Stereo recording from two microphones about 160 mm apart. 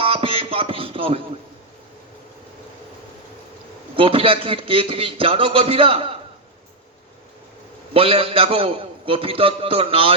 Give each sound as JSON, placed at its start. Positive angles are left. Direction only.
{"t": 0.0, "sound": "a sound", "side_deg": -35}
{"t": 3.9, "sound": "a man's voice", "side_deg": -35}
{"t": 7.9, "sound": "a man's voice", "side_deg": -35}